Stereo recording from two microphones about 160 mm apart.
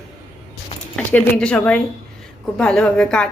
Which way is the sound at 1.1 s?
5° left (ahead or behind).